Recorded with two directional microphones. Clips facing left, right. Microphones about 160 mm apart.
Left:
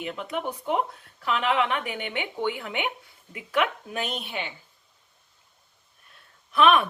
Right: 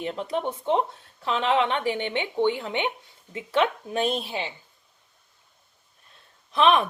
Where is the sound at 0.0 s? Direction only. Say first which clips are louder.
Right 3 dB; 35° right (ahead or behind).